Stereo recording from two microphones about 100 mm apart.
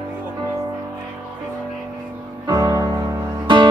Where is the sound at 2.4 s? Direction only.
45° right (ahead or behind).